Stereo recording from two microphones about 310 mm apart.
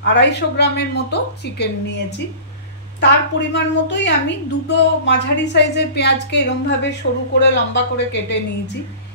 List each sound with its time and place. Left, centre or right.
0.0 s a woman's voice: left
3.0 s a woman's voice: left